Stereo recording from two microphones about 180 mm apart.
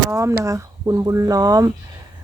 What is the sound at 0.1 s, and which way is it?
Speech, 15° right (ahead or behind).